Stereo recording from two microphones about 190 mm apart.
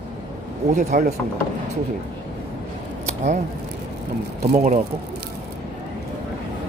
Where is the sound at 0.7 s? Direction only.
40° right (ahead or behind).